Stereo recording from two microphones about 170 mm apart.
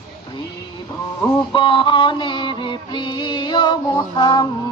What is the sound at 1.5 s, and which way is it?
Music, 30° left (ahead or behind).